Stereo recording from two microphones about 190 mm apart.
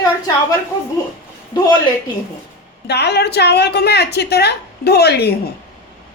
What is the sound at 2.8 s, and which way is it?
Speech, 60° left (ahead or behind).